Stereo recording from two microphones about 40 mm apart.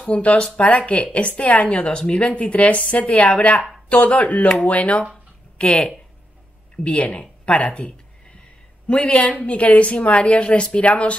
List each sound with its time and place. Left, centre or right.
0.1 s a woman's voice: left